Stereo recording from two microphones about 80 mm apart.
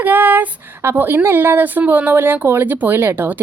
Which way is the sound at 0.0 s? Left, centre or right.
Right.